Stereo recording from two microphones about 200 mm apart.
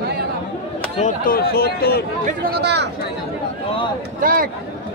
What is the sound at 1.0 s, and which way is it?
Speech, 45° left (ahead or behind).